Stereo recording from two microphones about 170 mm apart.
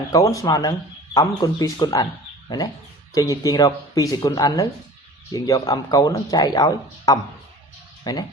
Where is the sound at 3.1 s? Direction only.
20° left (ahead or behind).